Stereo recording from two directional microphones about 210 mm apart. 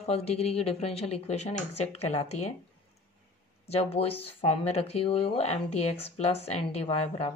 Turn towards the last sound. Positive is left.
turn(degrees=30)  # may be behind; listen again after turning